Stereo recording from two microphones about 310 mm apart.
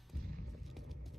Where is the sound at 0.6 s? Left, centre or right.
Centre.